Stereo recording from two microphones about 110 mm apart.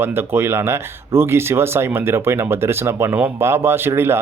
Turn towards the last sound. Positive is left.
turn(degrees=-20)  # may be behind; listen again after turning